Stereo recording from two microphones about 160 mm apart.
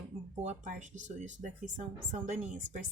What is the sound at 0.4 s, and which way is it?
Speech, 50° right (ahead or behind).